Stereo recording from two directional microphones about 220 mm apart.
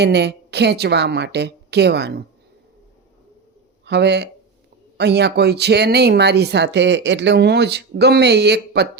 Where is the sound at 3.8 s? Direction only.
50° right (ahead or behind).